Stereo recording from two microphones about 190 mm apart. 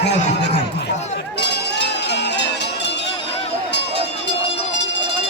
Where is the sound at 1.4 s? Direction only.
65° left (ahead or behind).